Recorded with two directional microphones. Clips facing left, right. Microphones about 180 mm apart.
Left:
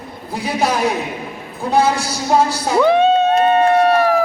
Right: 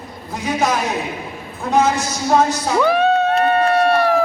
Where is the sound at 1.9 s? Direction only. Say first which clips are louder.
Even; 35° left (ahead or behind).